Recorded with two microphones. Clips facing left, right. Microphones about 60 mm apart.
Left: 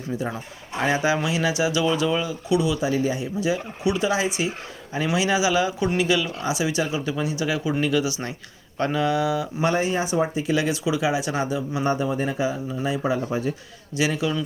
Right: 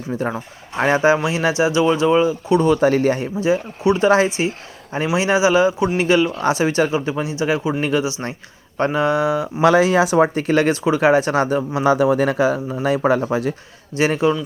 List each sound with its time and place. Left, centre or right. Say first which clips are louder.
0.1 s speech: right 5 dB; right
3.4 s speech: right 7 dB; right
6.0 s speech: right 8 dB; right
9.6 s speech: right 11 dB; right
11.8 s speech: right 9 dB; right
13.9 s speech: right 7 dB; right